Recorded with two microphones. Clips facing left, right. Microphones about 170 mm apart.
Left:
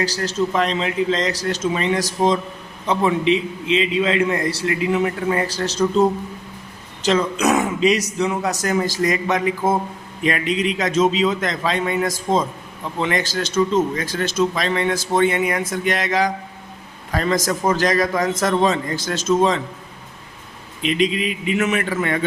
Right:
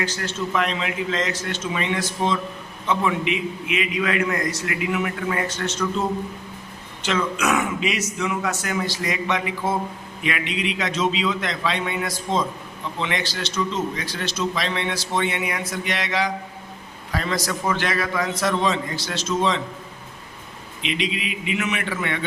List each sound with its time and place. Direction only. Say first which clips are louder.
0.0 s a man's voice: left 5 dB; 35° left (ahead or behind)
20.8 s a man's voice: left 7 dB; 40° left (ahead or behind)